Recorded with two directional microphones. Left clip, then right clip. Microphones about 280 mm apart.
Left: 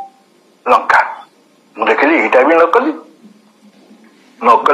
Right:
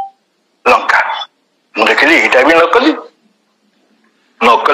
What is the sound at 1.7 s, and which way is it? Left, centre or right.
Speech, right.